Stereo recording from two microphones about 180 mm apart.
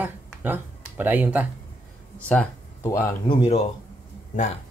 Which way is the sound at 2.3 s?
10° left (ahead or behind).